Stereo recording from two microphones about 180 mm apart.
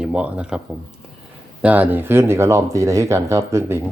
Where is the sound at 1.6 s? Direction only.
10° right (ahead or behind).